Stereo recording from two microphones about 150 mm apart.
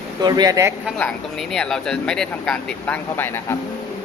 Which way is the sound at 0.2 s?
25° right (ahead or behind).